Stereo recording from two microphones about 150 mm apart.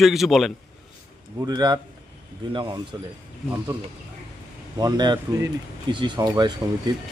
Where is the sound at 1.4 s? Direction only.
25° right (ahead or behind).